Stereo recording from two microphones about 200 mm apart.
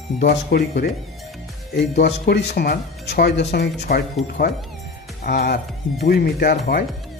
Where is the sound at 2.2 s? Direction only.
55° left (ahead or behind).